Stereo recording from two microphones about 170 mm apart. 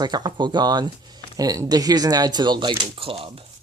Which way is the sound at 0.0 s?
25° right (ahead or behind).